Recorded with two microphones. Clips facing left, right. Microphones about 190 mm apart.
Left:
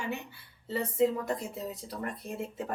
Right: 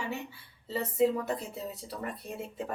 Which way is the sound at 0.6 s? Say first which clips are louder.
Even; centre (ahead or behind).